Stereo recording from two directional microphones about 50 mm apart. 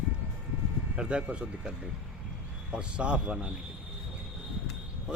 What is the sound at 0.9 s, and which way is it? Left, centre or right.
Speech, right.